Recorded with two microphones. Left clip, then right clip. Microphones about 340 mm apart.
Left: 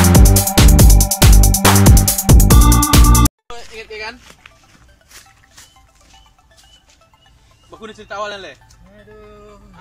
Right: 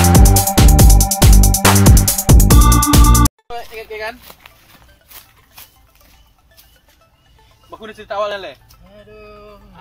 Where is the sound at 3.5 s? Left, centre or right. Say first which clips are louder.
Right 3 dB; right.